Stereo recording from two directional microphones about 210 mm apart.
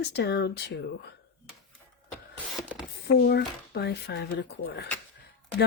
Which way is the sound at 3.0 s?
50° left (ahead or behind).